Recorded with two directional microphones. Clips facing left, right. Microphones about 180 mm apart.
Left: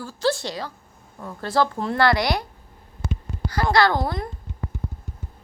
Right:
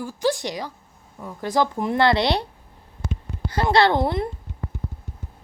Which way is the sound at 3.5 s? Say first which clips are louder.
Right 1 dB; 25° right (ahead or behind).